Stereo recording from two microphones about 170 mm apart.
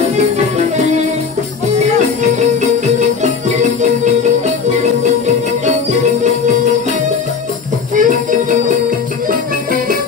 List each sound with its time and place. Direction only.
7.9 s music: 50° right (ahead or behind)